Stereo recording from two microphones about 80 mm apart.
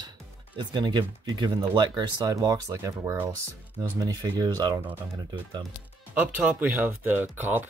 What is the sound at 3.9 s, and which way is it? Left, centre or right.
Speech, right.